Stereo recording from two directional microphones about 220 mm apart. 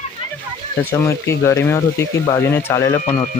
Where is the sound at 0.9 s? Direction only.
10° left (ahead or behind).